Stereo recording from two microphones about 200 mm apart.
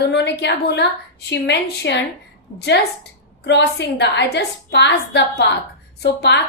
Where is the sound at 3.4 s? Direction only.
55° left (ahead or behind).